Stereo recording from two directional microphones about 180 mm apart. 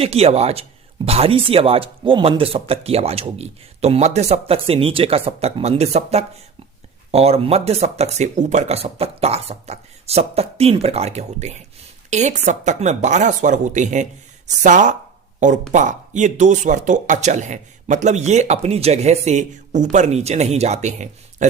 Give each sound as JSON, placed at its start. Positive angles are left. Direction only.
{"t": 0.0, "sound": "speech", "side_deg": -35}